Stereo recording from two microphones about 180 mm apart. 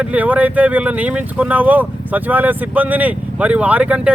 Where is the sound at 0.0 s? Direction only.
10° right (ahead or behind).